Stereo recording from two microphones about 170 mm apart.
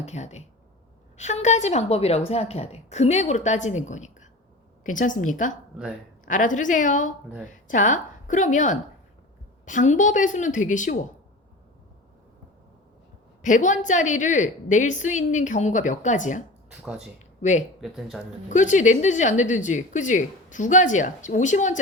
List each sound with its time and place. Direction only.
0.0 s a woman's voice: 40° left (ahead or behind)
13.4 s a woman's voice: 45° left (ahead or behind)
16.8 s speech: 5° right (ahead or behind)
17.2 s a sound: 45° left (ahead or behind)
17.7 s speech: centre (ahead or behind)
18.4 s a woman's voice: 45° left (ahead or behind)